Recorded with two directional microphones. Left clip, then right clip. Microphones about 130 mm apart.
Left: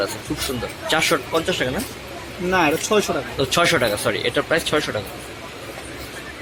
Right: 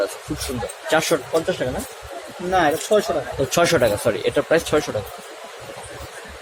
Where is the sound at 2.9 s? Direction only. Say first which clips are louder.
Right 2 dB; 90° left.